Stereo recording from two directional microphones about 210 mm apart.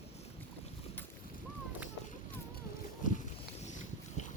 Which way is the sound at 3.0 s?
40° left (ahead or behind).